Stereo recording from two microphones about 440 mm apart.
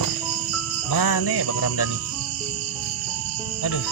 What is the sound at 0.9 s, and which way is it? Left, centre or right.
Music, left.